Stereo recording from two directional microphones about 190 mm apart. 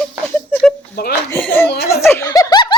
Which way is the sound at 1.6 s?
55° left (ahead or behind).